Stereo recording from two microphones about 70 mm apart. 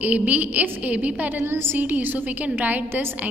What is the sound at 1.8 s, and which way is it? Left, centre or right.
A woman's voice, right.